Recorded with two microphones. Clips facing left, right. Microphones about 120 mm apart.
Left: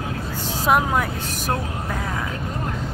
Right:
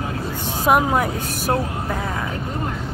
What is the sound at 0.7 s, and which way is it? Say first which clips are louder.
Speech: right 2 dB; 5° right (ahead or behind).